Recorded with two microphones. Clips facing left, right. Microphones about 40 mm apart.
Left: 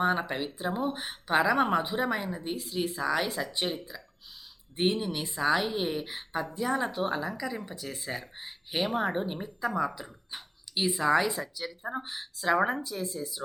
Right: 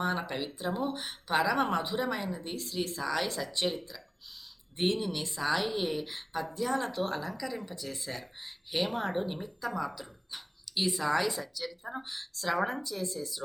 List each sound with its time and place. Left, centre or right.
0.0 s speech: centre